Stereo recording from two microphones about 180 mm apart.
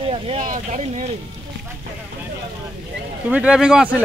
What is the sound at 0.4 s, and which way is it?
Speech, 40° right (ahead or behind).